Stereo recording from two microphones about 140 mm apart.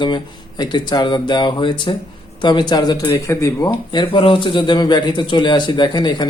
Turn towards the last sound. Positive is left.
turn(degrees=30)  # may be behind; listen again after turning